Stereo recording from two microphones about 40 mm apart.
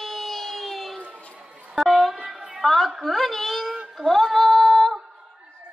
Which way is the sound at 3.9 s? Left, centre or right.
Centre.